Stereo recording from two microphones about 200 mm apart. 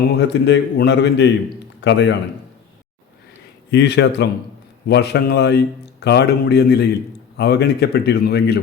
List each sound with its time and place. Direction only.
0.2 s a man's voice: 60° left (ahead or behind)
3.7 s a man's voice: 60° left (ahead or behind)